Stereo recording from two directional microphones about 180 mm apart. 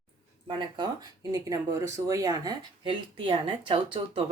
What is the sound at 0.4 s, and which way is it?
Speech, 25° right (ahead or behind).